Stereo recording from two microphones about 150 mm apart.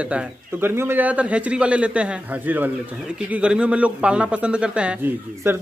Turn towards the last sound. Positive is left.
turn(degrees=-15)  # may be behind; listen again after turning